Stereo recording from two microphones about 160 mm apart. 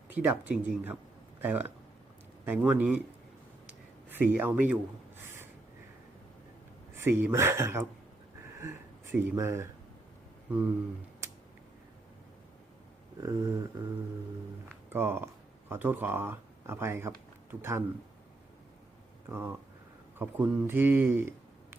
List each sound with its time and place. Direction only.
0.1 s speech: 10° right (ahead or behind)
3.7 s writing: 10° right (ahead or behind)
6.9 s speech: 15° right (ahead or behind)
13.2 s a sound: 20° right (ahead or behind)
14.8 s speech: 15° right (ahead or behind)
19.3 s speech: 15° right (ahead or behind)